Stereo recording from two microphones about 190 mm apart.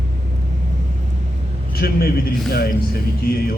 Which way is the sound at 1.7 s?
55° left (ahead or behind).